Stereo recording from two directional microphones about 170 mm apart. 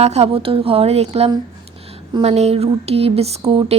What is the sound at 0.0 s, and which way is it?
Speech, 40° right (ahead or behind).